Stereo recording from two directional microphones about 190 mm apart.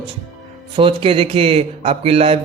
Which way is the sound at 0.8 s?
25° right (ahead or behind).